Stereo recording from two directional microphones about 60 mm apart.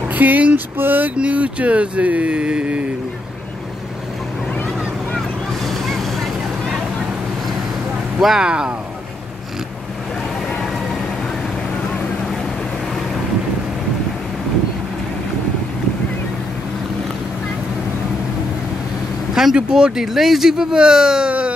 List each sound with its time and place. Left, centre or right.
0.1 s a sound: right
1.1 s speech: right
4.6 s vehicle: centre
8.2 s speech: centre
8.5 s speech: centre
19.3 s speech: centre